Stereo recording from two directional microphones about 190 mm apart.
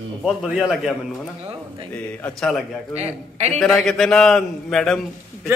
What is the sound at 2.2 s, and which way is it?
Speech, 5° left (ahead or behind).